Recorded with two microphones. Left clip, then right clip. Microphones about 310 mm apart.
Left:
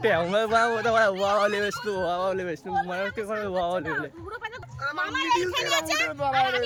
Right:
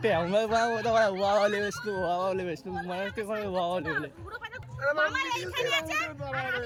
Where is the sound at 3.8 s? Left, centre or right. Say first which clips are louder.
Left 2 dB; centre.